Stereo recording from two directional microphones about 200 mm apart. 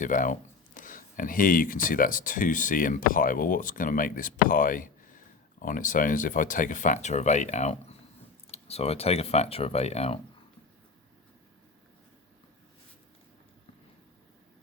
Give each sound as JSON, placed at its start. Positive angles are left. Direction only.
{"t": 0.0, "sound": "speech", "side_deg": 40}